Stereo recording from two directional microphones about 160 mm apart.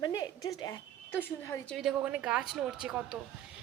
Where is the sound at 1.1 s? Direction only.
10° left (ahead or behind).